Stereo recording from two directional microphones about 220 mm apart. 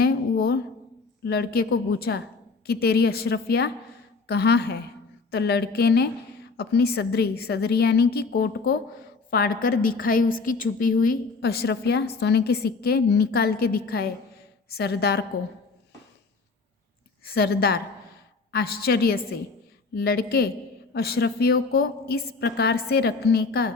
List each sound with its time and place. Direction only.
0.0 s a sound: 45° left (ahead or behind)
1.2 s a woman's voice: 45° left (ahead or behind)
17.2 s a woman's voice: 45° left (ahead or behind)